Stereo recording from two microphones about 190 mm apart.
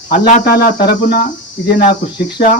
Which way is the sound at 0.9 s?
55° left (ahead or behind).